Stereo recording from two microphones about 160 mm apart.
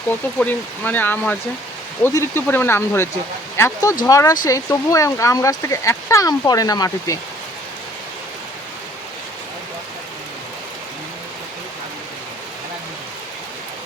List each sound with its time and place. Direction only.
0.1 s speech: 10° left (ahead or behind)